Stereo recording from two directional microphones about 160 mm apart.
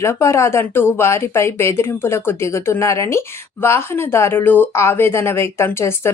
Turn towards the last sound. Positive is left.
turn(degrees=15)  # may be behind; listen again after turning